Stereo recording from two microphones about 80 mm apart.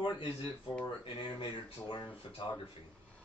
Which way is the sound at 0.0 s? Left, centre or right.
Left.